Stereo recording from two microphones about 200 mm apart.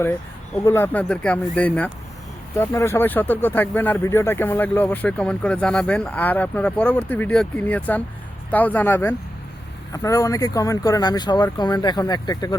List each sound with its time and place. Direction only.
0.0 s speech: 10° left (ahead or behind)